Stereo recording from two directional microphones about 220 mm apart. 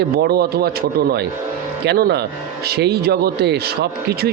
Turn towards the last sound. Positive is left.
turn(degrees=-50)  # may be behind; listen again after turning